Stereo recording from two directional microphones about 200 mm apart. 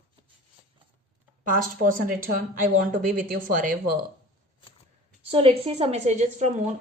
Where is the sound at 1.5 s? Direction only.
45° right (ahead or behind).